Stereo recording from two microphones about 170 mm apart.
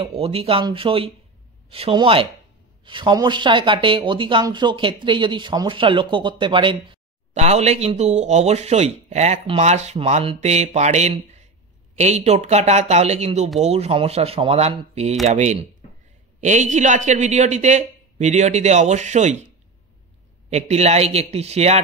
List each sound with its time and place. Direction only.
0.0 s speech: 35° right (ahead or behind)
7.3 s a man's voice: 40° right (ahead or behind)
20.4 s speech: 40° right (ahead or behind)